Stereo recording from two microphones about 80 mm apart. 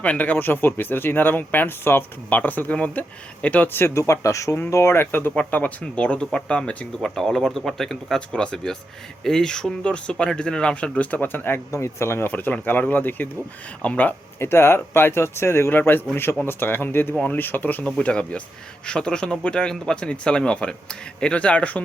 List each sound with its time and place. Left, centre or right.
0.0 s speech: centre
14.3 s speech: left